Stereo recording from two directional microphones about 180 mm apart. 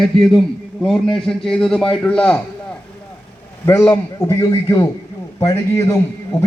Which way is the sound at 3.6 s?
15° left (ahead or behind).